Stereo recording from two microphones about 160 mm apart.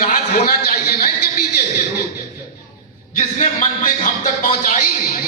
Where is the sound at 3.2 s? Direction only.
50° left (ahead or behind).